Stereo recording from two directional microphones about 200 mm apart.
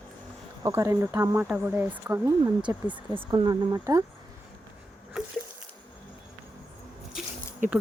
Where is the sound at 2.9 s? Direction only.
20° right (ahead or behind).